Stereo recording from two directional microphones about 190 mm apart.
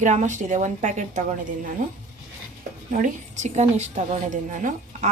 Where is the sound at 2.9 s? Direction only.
40° right (ahead or behind).